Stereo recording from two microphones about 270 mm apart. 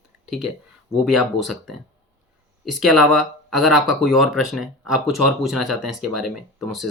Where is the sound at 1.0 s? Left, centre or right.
Centre.